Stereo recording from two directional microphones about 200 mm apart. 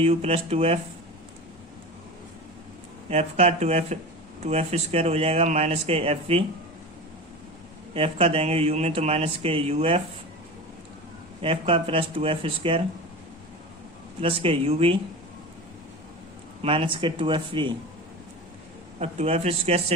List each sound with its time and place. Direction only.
0.0 s speech: 30° right (ahead or behind)
3.1 s speech: 30° right (ahead or behind)
7.9 s speech: 30° right (ahead or behind)
11.4 s speech: 30° right (ahead or behind)
14.2 s speech: 30° right (ahead or behind)
16.6 s speech: 25° right (ahead or behind)
18.9 s speech: 30° right (ahead or behind)